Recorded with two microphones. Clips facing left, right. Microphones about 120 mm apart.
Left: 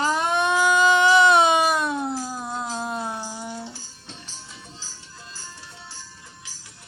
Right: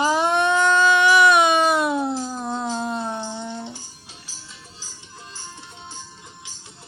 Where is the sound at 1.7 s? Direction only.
5° right (ahead or behind).